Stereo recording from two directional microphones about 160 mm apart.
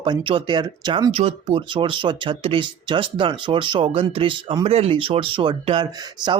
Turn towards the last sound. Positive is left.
turn(degrees=-25)  # may be behind; listen again after turning